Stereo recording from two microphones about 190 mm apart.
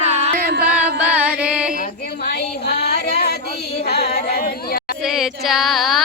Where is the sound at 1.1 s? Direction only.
5° right (ahead or behind).